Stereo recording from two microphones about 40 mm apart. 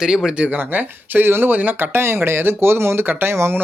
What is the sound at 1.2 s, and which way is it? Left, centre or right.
Speech, right.